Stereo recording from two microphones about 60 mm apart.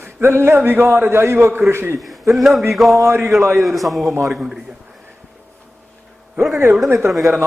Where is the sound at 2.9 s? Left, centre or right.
Right.